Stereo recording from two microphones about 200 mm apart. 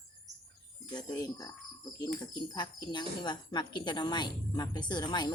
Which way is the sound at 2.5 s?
20° left (ahead or behind).